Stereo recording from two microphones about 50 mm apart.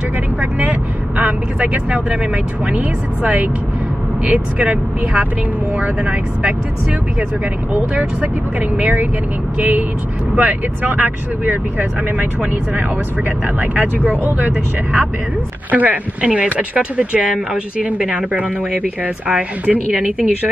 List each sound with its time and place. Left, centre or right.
0.4 s speech: right
5.8 s speech: right
8.2 s speech: right
13.6 s speech: right
16.2 s speech: right